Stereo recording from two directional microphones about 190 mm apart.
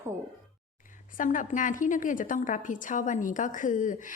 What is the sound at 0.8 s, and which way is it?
A woman's voice, 45° left (ahead or behind).